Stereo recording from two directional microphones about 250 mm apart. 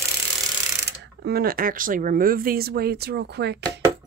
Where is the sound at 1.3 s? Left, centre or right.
Right.